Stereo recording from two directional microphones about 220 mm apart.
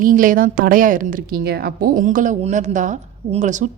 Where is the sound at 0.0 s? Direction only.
40° right (ahead or behind).